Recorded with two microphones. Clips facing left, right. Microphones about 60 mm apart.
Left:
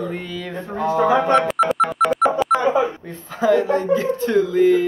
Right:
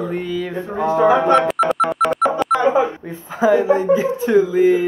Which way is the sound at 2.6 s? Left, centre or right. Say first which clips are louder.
Right 2 dB; right.